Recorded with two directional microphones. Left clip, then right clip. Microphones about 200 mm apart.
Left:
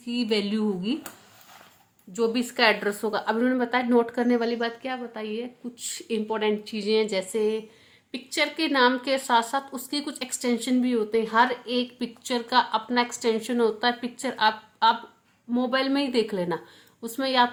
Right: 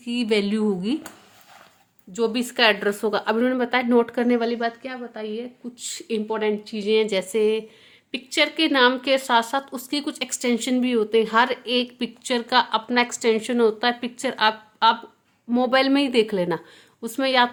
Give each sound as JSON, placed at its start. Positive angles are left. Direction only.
{"t": 0.0, "sound": "a woman's voice", "side_deg": -30}
{"t": 2.1, "sound": "a woman's voice", "side_deg": -20}
{"t": 15.4, "sound": "a woman's voice", "side_deg": -45}